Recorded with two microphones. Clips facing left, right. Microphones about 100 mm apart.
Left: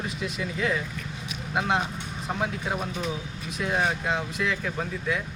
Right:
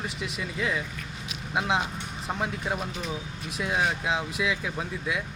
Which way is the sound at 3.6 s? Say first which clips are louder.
Left 1 dB; centre (ahead or behind).